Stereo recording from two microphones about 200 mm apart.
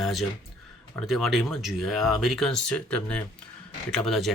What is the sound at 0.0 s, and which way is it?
Speech, centre (ahead or behind).